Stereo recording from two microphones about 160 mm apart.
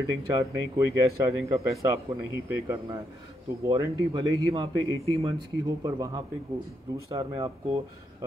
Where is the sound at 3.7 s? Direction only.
25° right (ahead or behind).